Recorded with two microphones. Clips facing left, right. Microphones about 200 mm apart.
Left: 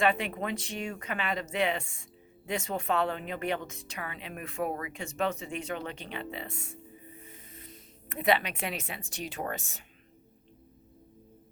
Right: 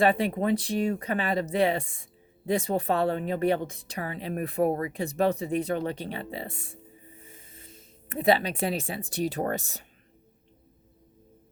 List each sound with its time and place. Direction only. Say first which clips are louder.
0.0 s a woman's voice: right 5 dB; 35° right (ahead or behind)